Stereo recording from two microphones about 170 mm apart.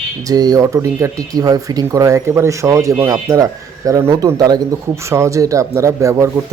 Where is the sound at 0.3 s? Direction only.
20° right (ahead or behind).